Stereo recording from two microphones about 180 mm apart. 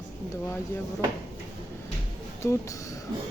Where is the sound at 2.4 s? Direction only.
15° left (ahead or behind).